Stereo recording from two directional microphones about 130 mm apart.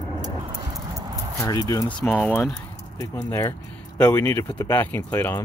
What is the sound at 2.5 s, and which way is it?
Keys jangling, 25° left (ahead or behind).